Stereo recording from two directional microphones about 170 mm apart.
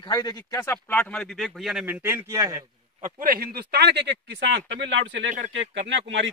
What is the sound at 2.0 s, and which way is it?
Speech, 15° right (ahead or behind).